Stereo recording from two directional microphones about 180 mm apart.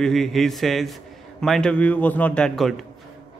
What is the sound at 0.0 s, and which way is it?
Speech, centre (ahead or behind).